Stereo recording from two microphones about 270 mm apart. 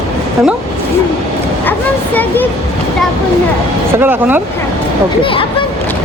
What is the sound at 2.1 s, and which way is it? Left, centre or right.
Speech, centre.